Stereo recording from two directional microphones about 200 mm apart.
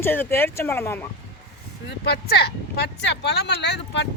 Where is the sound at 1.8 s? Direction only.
55° left (ahead or behind).